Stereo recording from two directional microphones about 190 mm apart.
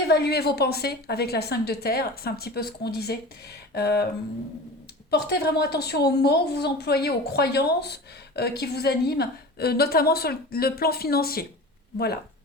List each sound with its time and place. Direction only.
0.1 s a woman's voice: 60° left (ahead or behind)
5.1 s a woman's voice: 60° left (ahead or behind)